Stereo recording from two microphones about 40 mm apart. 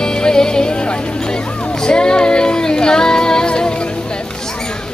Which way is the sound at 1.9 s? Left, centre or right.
Left.